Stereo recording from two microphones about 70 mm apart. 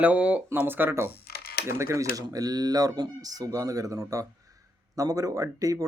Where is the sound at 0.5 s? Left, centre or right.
Right.